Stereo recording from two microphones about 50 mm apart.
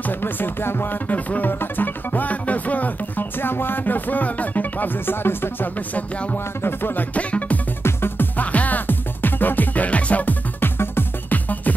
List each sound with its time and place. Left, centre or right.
0.0 s music: left
5.8 s music: left
6.6 s music: left
7.2 s music: left
7.8 s music: left
8.4 s music: left
10.6 s music: left
11.3 s music: left